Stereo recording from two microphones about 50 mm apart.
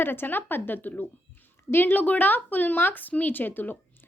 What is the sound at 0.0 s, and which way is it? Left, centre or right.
A woman's voice, left.